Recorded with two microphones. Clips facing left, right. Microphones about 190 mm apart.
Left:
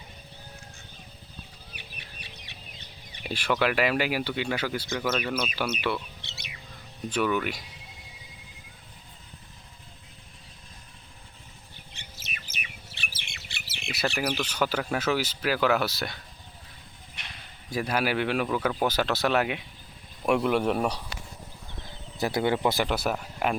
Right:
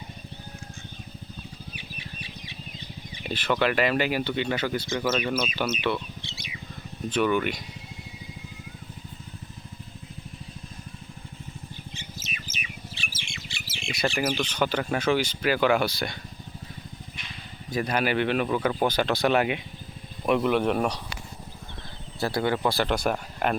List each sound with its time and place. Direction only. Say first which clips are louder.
1.7 s bird: right 6 dB; 55° left (ahead or behind)
3.2 s speech: right 1 dB; 10° left (ahead or behind)
6.2 s bird: right 6 dB; 65° left (ahead or behind)
7.1 s speech: right 3 dB; 5° left (ahead or behind)
11.9 s bird: right 6 dB; 60° left (ahead or behind)
14.2 s speech: right 2 dB; 5° left (ahead or behind)
17.7 s speech: right 1 dB; 5° left (ahead or behind)
22.2 s speech: even; 20° left (ahead or behind)
22.9 s speech: right 2 dB; 5° left (ahead or behind)